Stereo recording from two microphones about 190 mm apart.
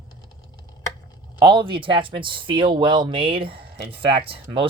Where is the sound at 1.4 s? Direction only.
25° right (ahead or behind).